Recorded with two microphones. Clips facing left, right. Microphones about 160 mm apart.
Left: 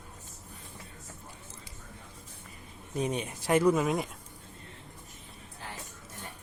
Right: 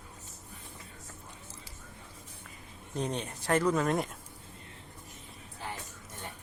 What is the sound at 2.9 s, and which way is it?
Speech, 10° left (ahead or behind).